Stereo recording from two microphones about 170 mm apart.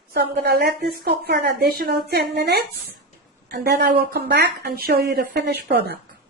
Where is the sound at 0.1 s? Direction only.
65° right (ahead or behind).